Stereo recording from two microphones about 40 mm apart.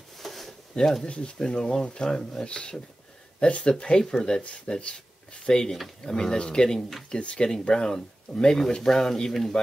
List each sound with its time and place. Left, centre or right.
0.2 s a sound: centre
0.7 s speech: centre
1.0 s speech: left
1.4 s speech: centre
4.0 s speech: centre
4.6 s speech: left